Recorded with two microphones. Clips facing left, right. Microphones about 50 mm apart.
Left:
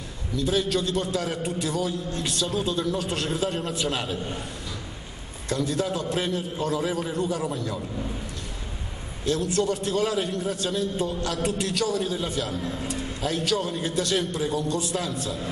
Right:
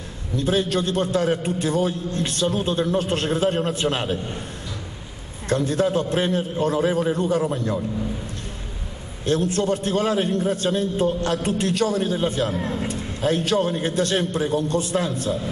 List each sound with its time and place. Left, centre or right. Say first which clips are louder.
0.4 s a man's voice: right 3 dB; right
5.5 s a man's voice: right 6 dB; right
9.2 s a man's voice: right 3 dB; right